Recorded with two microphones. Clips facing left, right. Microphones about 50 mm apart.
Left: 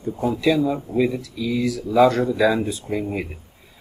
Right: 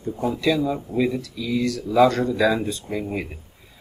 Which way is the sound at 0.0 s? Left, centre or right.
Centre.